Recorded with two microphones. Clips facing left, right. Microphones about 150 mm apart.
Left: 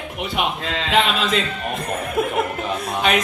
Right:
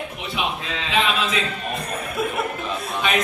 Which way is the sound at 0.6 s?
70° left (ahead or behind).